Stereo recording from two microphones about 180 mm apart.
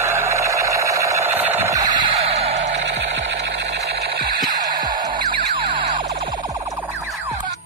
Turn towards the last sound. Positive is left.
turn(degrees=-25)  # may be behind; listen again after turning